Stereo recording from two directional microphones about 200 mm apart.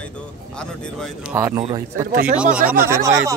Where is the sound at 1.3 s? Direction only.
15° right (ahead or behind).